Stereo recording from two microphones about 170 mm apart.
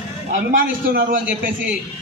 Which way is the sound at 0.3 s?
55° right (ahead or behind).